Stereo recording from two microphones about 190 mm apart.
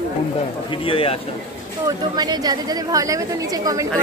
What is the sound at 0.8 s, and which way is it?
Speech, 30° left (ahead or behind).